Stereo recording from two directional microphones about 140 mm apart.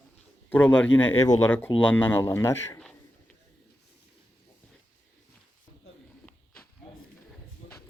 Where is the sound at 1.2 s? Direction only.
25° left (ahead or behind).